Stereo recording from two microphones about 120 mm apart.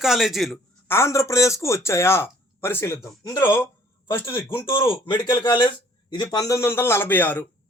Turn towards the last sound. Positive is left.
turn(degrees=15)  # may be behind; listen again after turning